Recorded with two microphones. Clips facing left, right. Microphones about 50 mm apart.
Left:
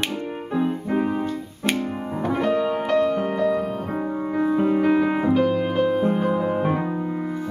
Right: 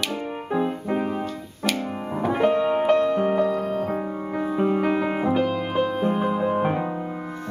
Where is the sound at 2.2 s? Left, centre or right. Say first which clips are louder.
Right 3 dB; centre.